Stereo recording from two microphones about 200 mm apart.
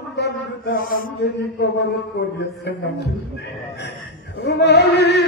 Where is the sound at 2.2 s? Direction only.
55° left (ahead or behind).